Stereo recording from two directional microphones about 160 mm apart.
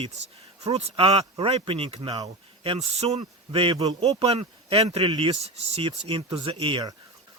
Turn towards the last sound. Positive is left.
turn(degrees=-30)  # may be behind; listen again after turning